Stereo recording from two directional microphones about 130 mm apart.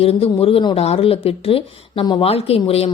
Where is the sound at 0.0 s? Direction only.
45° left (ahead or behind).